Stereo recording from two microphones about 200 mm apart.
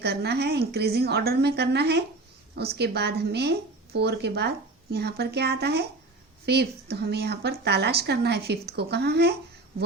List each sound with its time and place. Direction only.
0.0 s a woman's voice: 55° right (ahead or behind)